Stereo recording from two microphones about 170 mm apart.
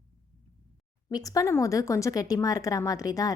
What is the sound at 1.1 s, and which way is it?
Speech, 20° left (ahead or behind).